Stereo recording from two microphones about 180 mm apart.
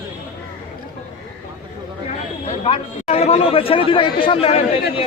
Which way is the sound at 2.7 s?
35° left (ahead or behind).